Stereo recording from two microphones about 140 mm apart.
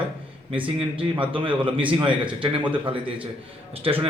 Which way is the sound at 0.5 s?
40° right (ahead or behind).